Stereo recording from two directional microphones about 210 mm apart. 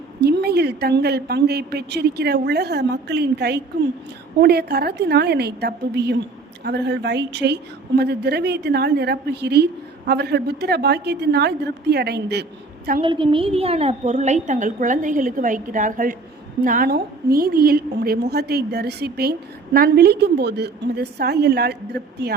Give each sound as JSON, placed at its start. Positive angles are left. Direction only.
{"t": 0.2, "sound": "a woman's voice", "side_deg": -50}
{"t": 13.0, "sound": "a woman's voice", "side_deg": -25}